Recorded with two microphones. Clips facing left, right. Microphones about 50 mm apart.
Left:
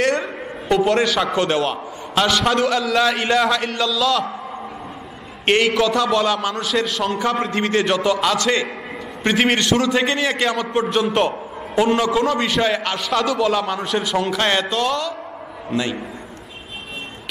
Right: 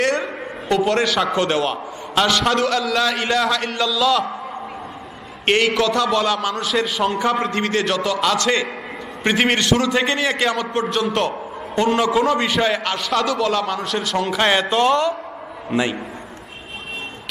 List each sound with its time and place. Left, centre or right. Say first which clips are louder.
0.0 s a man's voice: even; centre
5.4 s a man's voice: left 1 dB; centre
12.0 s a man's voice: right 1 dB; centre
14.3 s a man's voice: right 2 dB; centre
15.7 s a man's voice: right 2 dB; centre